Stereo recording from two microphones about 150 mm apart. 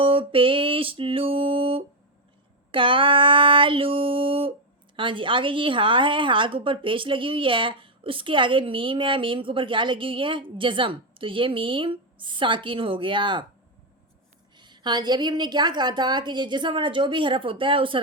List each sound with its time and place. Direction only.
0.0 s music: 35° right (ahead or behind)
2.7 s a sound: 35° right (ahead or behind)
4.9 s a woman's voice: 35° right (ahead or behind)
14.5 s a woman's voice: 30° right (ahead or behind)